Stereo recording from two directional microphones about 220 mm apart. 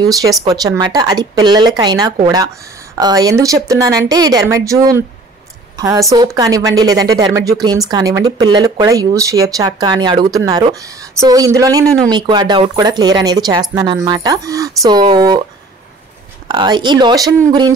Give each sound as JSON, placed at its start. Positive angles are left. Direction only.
{"t": 0.0, "sound": "speech", "side_deg": -15}
{"t": 16.4, "sound": "speech", "side_deg": -20}